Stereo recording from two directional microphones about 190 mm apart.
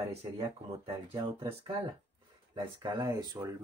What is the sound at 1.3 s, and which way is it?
Speech, 30° right (ahead or behind).